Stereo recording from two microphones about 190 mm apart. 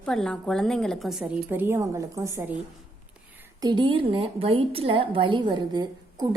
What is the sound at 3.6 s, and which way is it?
A woman's voice, 25° right (ahead or behind).